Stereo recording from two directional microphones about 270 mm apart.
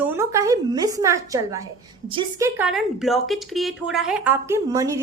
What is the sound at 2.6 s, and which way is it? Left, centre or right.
Speech, centre.